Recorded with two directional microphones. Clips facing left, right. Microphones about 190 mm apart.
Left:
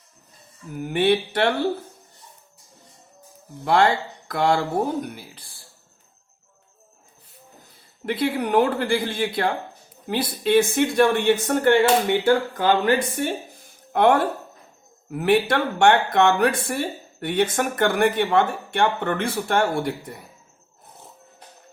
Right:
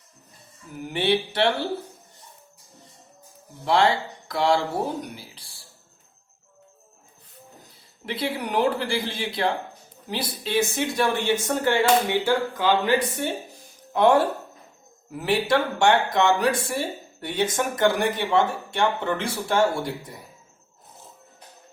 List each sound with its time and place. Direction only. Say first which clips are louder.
0.8 s speech: left 4 dB; 50° left (ahead or behind)
3.6 s speech: left 2 dB; 50° left (ahead or behind)
8.0 s speech: left 5 dB; 50° left (ahead or behind)